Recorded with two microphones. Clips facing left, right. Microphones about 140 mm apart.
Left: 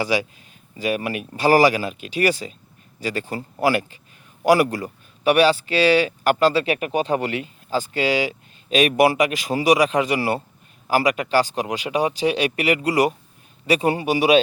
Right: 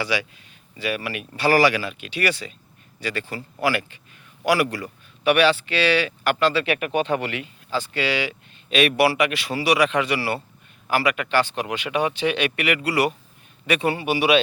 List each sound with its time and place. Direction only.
0.0 s speech: 40° left (ahead or behind)